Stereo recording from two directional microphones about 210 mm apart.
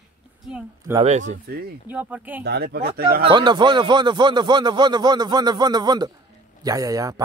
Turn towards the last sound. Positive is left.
turn(degrees=-15)  # may be behind; listen again after turning